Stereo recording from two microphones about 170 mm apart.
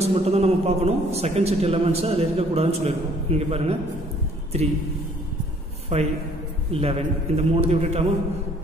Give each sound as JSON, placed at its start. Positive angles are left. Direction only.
{"t": 0.0, "sound": "a man's voice", "side_deg": -35}
{"t": 5.9, "sound": "a man's voice", "side_deg": -40}